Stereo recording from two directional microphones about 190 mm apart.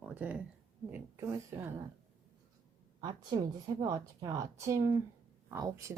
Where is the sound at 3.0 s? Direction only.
25° right (ahead or behind).